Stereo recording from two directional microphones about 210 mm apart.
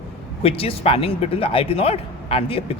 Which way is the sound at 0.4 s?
25° left (ahead or behind).